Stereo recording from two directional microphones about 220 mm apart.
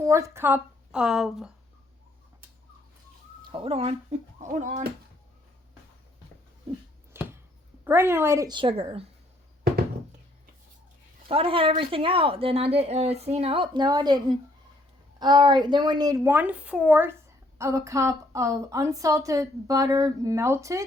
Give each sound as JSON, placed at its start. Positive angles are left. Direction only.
{"t": 0.0, "sound": "speech", "side_deg": -15}
{"t": 3.4, "sound": "speech", "side_deg": -25}
{"t": 7.1, "sound": "a sound", "side_deg": -10}
{"t": 7.9, "sound": "a woman's voice", "side_deg": -10}
{"t": 11.3, "sound": "a woman's voice", "side_deg": -25}